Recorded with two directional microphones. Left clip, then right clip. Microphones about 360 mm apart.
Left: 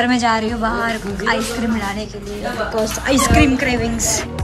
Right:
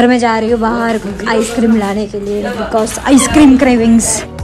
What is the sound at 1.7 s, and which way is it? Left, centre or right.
Speech, right.